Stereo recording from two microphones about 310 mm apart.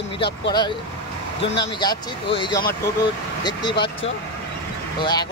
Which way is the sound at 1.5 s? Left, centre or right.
Centre.